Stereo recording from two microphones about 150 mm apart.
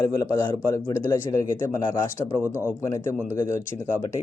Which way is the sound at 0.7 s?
20° left (ahead or behind).